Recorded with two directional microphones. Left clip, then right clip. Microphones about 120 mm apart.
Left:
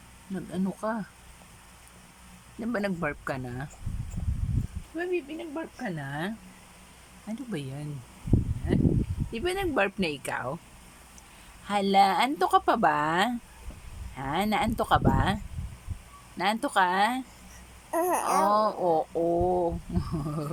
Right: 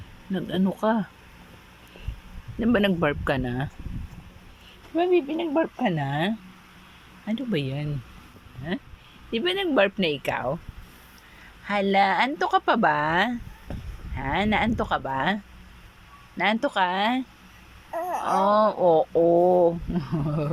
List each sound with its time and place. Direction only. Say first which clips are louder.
0.3 s speech: right 7 dB; 20° right (ahead or behind)
2.6 s speech: right 8 dB; 25° right (ahead or behind)
4.9 s speech: right 9 dB; 25° right (ahead or behind)
6.1 s bird: right 7 dB; 15° right (ahead or behind)
8.7 s speech: left 5 dB; centre (ahead or behind)
11.6 s speech: right 1 dB; 10° left (ahead or behind)
16.4 s speech: right 2 dB; centre (ahead or behind)
17.9 s a sound: left 2 dB; 30° left (ahead or behind)
18.4 s speech: right 7 dB; 10° left (ahead or behind)
18.8 s speech: right 6 dB; centre (ahead or behind)
19.3 s bird: right 7 dB; 10° right (ahead or behind)